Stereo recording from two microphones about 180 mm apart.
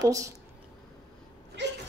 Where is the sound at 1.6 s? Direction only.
80° right.